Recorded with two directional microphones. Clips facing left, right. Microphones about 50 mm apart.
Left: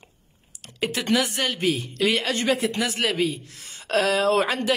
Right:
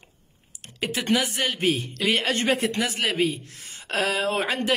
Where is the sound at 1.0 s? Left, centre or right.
Right.